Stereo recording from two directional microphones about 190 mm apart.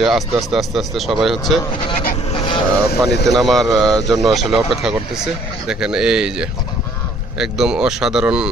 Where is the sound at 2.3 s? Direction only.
25° left (ahead or behind).